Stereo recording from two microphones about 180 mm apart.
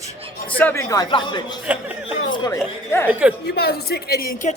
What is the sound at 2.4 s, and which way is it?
Speech, 15° left (ahead or behind).